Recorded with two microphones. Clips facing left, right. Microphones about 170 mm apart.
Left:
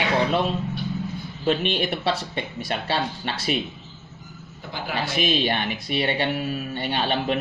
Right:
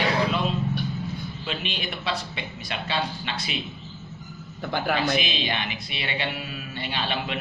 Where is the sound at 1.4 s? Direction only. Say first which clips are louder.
Left 12 dB; 45° left (ahead or behind).